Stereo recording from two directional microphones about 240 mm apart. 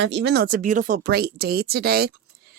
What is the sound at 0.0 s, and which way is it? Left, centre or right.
Speech, right.